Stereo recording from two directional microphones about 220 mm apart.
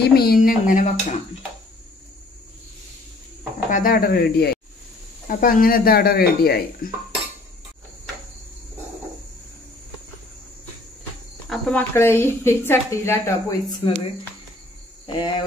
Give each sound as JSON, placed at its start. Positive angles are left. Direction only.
{"t": 0.0, "sound": "speech", "side_deg": 45}
{"t": 3.7, "sound": "speech", "side_deg": 40}
{"t": 11.4, "sound": "speech", "side_deg": 5}
{"t": 15.0, "sound": "cricket", "side_deg": 20}